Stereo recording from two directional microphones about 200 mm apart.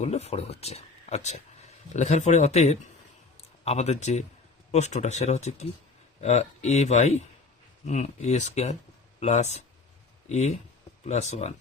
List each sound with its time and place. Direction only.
0.0 s speech: 35° left (ahead or behind)